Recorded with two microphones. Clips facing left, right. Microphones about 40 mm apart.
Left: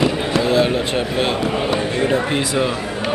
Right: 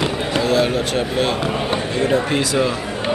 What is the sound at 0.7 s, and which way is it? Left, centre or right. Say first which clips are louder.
Speech: even; centre.